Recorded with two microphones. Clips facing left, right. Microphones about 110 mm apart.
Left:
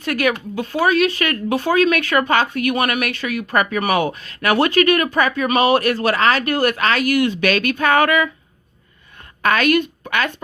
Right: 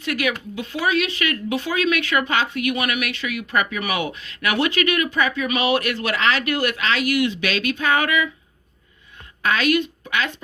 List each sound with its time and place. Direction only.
0.0 s speech: 45° left (ahead or behind)
9.4 s a woman's voice: 50° left (ahead or behind)